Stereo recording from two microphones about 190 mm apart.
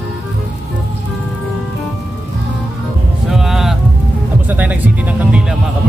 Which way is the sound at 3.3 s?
Centre (ahead or behind).